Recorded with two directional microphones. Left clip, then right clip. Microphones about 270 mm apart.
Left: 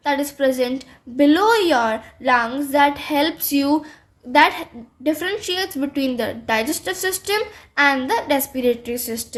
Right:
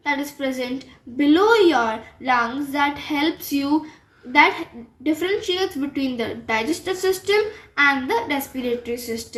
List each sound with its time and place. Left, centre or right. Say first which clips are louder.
0.0 s a woman's voice: left 5 dB; left